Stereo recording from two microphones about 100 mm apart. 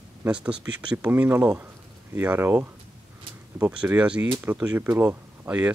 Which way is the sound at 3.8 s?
10° right (ahead or behind).